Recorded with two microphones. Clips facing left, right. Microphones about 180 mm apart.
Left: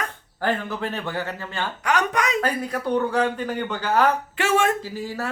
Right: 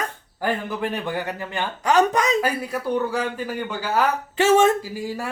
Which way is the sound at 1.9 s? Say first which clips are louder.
Right 5 dB; 30° right (ahead or behind).